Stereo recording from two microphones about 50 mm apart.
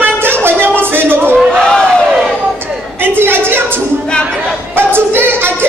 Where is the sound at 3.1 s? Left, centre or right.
Right.